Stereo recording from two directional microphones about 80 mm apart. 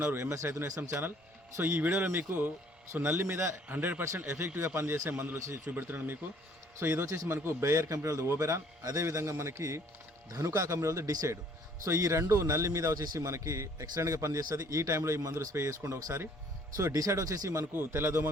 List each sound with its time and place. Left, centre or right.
0.0 s a man's voice: right
11.9 s a man's voice: right
16.7 s a man's voice: right